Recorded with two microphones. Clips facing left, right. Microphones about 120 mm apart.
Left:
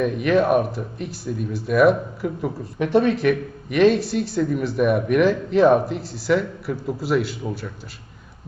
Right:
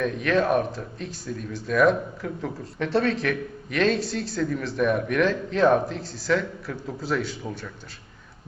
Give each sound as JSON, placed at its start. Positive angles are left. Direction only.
{"t": 0.0, "sound": "speech", "side_deg": 10}